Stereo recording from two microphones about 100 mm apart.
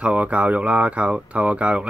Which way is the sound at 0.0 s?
15° right (ahead or behind).